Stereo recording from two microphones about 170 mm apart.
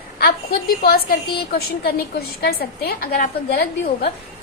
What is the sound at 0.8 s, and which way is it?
A woman's voice, 60° left (ahead or behind).